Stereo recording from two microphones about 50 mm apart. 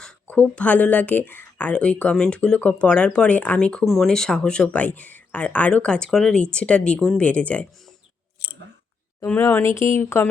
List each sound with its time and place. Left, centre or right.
0.5 s speech: left
1.7 s speech: left
3.8 s speech: centre
4.1 s speech: centre
6.3 s speech: left
9.5 s speech: left